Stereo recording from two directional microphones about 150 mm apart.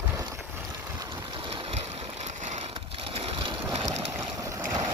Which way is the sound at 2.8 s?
40° right (ahead or behind).